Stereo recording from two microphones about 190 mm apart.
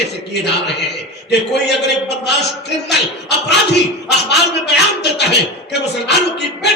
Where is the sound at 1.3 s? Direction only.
60° left (ahead or behind).